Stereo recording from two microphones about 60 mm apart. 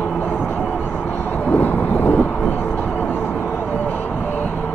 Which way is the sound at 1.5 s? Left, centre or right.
Left.